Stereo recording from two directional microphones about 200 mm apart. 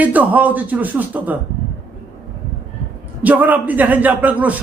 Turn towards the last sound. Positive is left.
turn(degrees=-10)  # may be behind; listen again after turning